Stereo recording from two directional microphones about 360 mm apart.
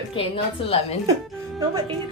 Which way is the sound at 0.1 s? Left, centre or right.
Centre.